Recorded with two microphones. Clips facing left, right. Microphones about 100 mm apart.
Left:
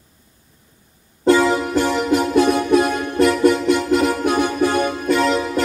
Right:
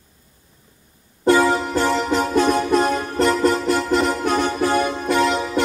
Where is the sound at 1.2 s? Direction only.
40° right (ahead or behind).